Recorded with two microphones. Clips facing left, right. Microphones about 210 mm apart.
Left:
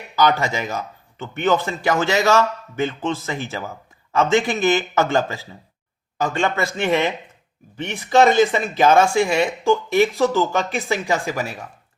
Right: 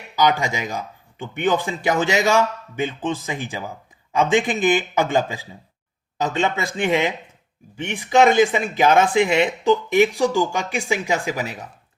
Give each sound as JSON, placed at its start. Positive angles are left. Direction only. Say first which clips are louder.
{"t": 0.2, "sound": "speech", "louder": "left 1 dB", "side_deg": -15}